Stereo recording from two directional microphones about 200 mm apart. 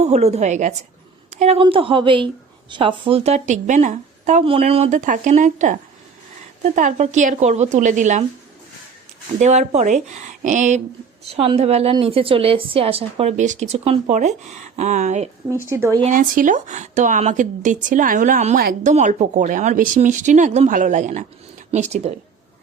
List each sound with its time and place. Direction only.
0.0 s a woman's voice: 35° right (ahead or behind)
9.4 s speech: 35° right (ahead or behind)
15.7 s speech: 15° right (ahead or behind)
16.0 s speech: 40° right (ahead or behind)